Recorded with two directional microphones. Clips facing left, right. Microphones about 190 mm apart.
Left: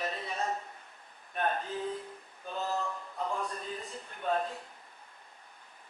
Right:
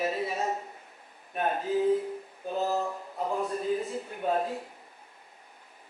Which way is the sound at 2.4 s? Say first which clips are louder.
Right 5 dB; 40° right (ahead or behind).